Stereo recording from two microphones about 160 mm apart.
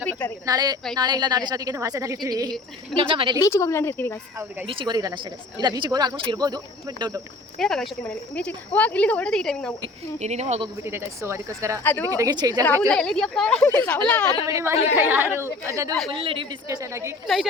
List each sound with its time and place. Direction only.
0.0 s a sound: 10° left (ahead or behind)
0.4 s a woman's voice: 25° right (ahead or behind)
3.3 s speech: 20° left (ahead or behind)
4.6 s a woman's voice: 35° right (ahead or behind)
7.6 s speech: 5° left (ahead or behind)
10.2 s speech: 45° right (ahead or behind)
10.8 s speech: 15° right (ahead or behind)
11.8 s speech: 10° left (ahead or behind)
12.1 s a woman's voice: 25° right (ahead or behind)
12.9 s speech: 5° left (ahead or behind)
14.4 s a woman's voice: 15° right (ahead or behind)
16.0 s a woman's voice: 35° right (ahead or behind)
16.6 s a woman's voice: 20° right (ahead or behind)
17.2 s speech: centre (ahead or behind)